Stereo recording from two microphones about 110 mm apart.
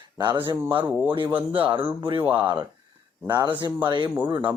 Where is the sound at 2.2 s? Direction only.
15° right (ahead or behind).